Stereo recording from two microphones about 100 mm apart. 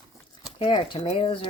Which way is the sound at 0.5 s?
60° left (ahead or behind).